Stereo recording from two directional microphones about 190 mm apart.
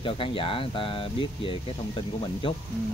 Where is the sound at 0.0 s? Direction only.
25° left (ahead or behind).